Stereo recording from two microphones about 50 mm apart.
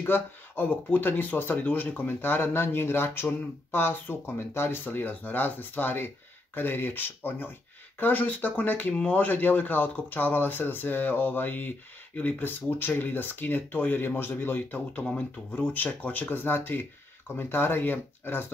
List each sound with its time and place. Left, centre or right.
0.0 s speech: left